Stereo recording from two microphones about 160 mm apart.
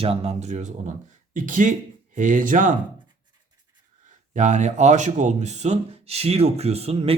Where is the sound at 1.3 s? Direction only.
55° right (ahead or behind).